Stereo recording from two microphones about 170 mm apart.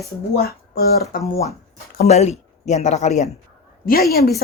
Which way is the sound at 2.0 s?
40° left (ahead or behind).